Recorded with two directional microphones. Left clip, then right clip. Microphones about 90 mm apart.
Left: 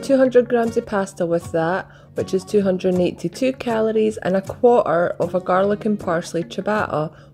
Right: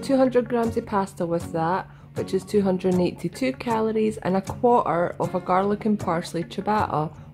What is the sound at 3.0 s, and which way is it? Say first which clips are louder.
Speech: left 5 dB; 30° left (ahead or behind).